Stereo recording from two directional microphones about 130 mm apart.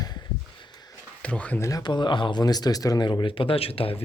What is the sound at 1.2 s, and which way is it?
Speech, 10° left (ahead or behind).